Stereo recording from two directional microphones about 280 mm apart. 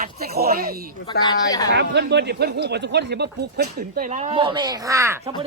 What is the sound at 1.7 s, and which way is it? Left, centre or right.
Speech, right.